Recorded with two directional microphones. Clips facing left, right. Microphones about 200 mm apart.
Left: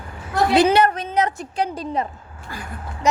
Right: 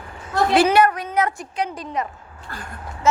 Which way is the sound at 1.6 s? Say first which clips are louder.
Left 2 dB; 30° left (ahead or behind).